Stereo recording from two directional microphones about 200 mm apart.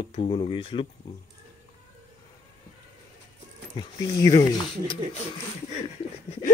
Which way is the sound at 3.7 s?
20° left (ahead or behind).